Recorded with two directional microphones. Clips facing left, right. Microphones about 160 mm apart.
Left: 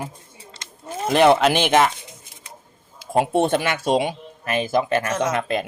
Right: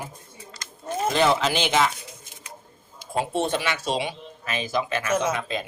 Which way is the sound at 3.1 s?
55° left (ahead or behind).